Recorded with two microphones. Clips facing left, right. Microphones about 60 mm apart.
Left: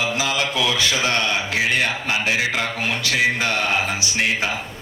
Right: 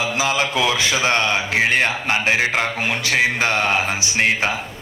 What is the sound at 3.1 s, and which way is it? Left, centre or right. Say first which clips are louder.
Speech: right 2 dB; right.